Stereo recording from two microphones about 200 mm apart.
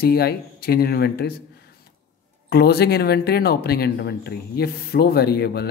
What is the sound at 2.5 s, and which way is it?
Speech, 50° left (ahead or behind).